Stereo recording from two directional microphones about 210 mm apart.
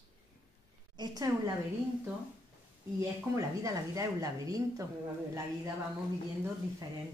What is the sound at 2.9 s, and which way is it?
Speech, 15° right (ahead or behind).